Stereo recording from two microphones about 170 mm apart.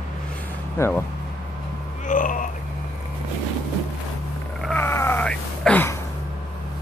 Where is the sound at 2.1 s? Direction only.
50° left (ahead or behind).